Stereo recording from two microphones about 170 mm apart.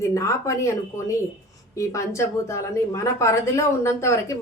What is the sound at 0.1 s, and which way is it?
A woman's voice, 15° left (ahead or behind).